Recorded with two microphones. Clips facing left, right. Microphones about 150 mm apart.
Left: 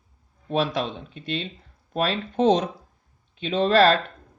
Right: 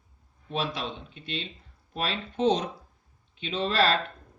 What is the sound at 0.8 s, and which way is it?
Speech, 45° left (ahead or behind).